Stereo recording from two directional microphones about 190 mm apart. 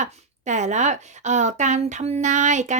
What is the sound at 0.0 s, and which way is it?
Speech, 40° right (ahead or behind).